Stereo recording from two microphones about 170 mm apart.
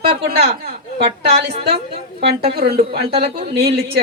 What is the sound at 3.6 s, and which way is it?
Speech, 70° right (ahead or behind).